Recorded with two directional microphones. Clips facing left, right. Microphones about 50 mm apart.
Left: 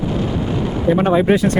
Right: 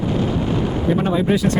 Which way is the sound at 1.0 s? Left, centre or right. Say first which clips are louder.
Left 6 dB; left.